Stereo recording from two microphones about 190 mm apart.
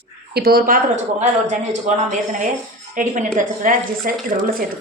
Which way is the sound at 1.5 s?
40° right (ahead or behind).